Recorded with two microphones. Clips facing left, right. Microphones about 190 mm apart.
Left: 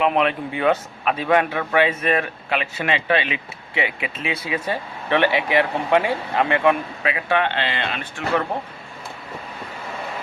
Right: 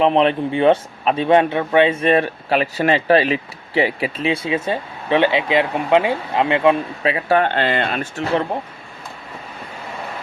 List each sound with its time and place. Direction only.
0.0 s a man's voice: 30° right (ahead or behind)